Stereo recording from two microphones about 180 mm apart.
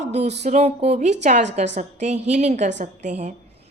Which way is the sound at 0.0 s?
40° right (ahead or behind).